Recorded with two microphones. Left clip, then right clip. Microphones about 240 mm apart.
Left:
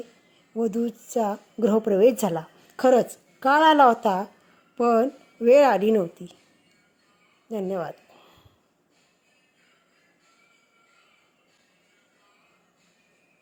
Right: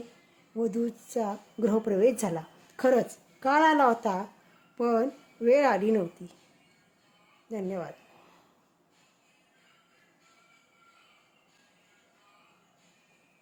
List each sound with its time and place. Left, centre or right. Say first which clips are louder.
0.5 s a woman's voice: left 4 dB; centre
7.5 s a woman's voice: left 6 dB; centre